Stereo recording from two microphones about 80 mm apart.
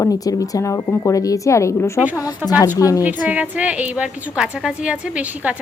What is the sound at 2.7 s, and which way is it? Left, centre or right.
Speech, left.